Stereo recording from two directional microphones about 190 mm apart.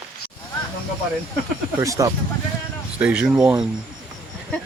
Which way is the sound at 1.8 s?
15° right (ahead or behind).